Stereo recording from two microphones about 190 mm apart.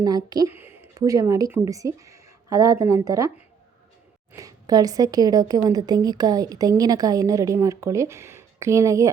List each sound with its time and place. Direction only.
0.0 s a woman's voice: 20° right (ahead or behind)